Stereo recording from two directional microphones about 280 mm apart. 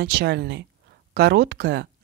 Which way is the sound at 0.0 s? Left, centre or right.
Right.